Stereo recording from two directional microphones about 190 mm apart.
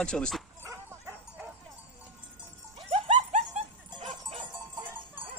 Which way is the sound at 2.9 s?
30° right (ahead or behind).